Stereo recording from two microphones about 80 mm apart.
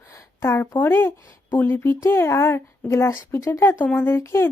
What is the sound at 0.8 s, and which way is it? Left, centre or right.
A woman's voice, left.